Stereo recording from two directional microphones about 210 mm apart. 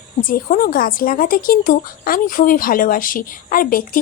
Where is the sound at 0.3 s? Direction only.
40° left (ahead or behind).